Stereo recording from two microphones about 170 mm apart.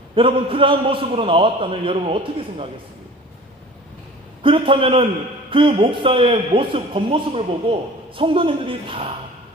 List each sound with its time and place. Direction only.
0.2 s a man's voice: 30° right (ahead or behind)
4.4 s a man's voice: 30° right (ahead or behind)